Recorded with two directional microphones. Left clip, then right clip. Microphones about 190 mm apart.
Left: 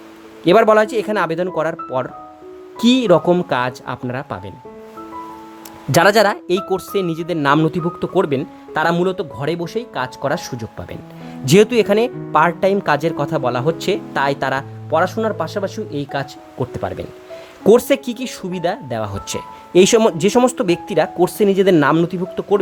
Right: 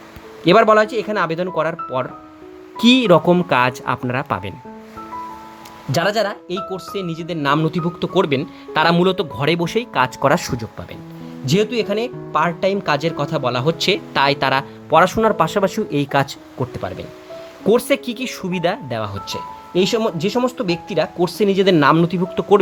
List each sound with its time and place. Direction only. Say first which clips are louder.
0.4 s speech: even; 10° left (ahead or behind)
5.9 s speech: left 6 dB; 25° left (ahead or behind); by 10.6 s 10° right (ahead or behind)
11.4 s speech: left 6 dB; 25° left (ahead or behind); by 16.3 s 5° right (ahead or behind)
17.7 s speech: left 4 dB; 15° left (ahead or behind)
19.7 s speech: left 6 dB; 25° left (ahead or behind); by 22.5 s 5° left (ahead or behind)